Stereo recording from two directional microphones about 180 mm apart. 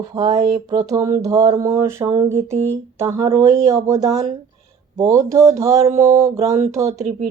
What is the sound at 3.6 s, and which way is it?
Speech, 20° right (ahead or behind).